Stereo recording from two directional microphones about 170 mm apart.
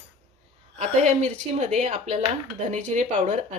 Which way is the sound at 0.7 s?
40° right (ahead or behind).